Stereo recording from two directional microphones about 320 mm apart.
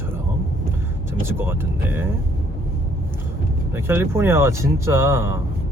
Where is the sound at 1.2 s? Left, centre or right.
Centre.